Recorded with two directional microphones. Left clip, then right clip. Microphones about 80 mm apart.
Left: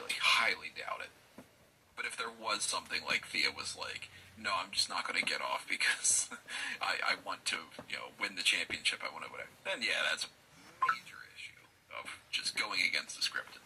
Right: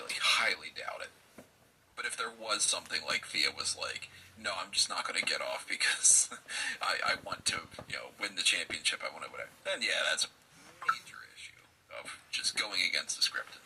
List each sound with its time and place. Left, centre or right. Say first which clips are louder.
0.2 s a sound: right 1 dB; right
2.0 s speech: right 2 dB; right
11.9 s speech: even; right